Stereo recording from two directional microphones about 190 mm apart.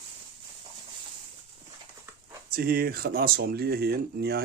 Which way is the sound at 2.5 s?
50° right (ahead or behind).